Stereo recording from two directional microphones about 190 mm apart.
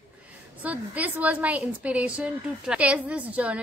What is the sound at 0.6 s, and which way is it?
A woman's voice, 10° right (ahead or behind).